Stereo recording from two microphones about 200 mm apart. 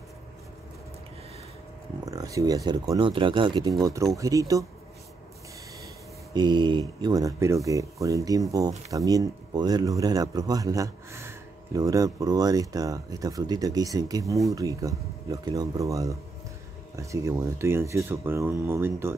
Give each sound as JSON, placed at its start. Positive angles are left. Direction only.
{"t": 2.0, "sound": "speech", "side_deg": -15}
{"t": 6.3, "sound": "speech", "side_deg": -20}